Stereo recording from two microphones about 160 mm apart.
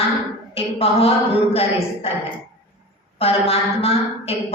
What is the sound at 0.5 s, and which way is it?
Speech, 40° left (ahead or behind).